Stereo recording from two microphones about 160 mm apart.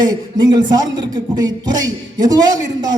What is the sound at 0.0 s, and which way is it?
Speech, 25° right (ahead or behind).